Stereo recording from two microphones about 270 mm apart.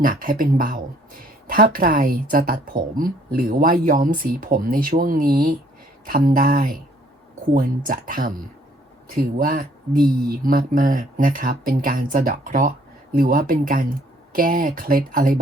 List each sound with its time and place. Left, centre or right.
0.0 s a woman's voice: right
7.9 s a woman's voice: right